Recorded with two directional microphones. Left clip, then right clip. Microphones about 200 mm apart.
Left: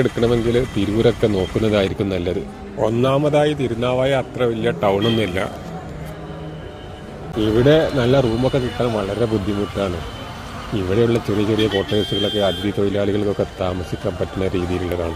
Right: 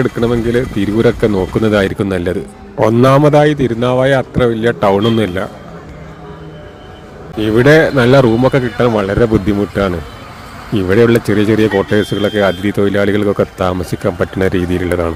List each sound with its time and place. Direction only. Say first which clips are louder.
0.0 s speech: right 3 dB; 40° right (ahead or behind)
2.8 s a man's voice: right 8 dB; 55° right (ahead or behind)
7.3 s speech: right 6 dB; 45° right (ahead or behind)
10.8 s speech: right 8 dB; 45° right (ahead or behind)